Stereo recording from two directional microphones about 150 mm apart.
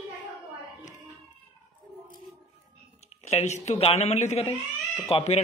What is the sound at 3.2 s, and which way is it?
Speech, 50° left (ahead or behind).